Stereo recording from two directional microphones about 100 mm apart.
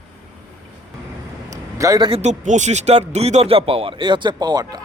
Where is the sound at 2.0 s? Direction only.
60° right (ahead or behind).